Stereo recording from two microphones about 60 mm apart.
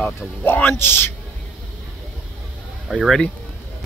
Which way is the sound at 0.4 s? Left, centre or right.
Left.